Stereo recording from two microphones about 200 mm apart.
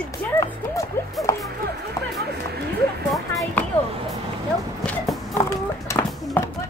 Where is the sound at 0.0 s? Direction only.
10° left (ahead or behind).